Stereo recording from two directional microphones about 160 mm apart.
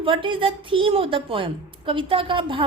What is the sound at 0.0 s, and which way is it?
A woman's voice, 30° right (ahead or behind).